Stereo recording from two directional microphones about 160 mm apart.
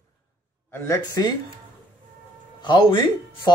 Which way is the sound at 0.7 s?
20° left (ahead or behind).